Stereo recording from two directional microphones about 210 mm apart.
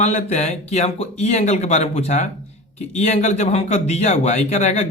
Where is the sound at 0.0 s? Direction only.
35° left (ahead or behind).